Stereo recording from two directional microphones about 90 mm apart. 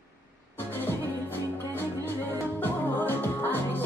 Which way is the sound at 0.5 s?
25° left (ahead or behind).